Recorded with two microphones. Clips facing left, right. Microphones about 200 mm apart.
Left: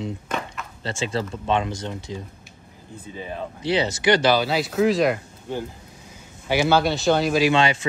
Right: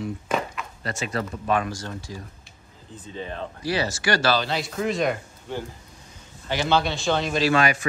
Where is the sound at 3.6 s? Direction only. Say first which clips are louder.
Left 4 dB; 20° left (ahead or behind); by 5.1 s centre (ahead or behind).